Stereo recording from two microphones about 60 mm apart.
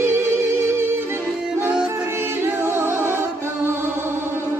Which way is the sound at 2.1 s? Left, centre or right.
Right.